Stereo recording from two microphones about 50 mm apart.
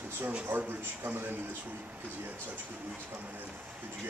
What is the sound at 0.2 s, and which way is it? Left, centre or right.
Speech, right.